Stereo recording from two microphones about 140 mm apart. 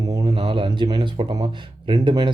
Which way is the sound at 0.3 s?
40° right (ahead or behind).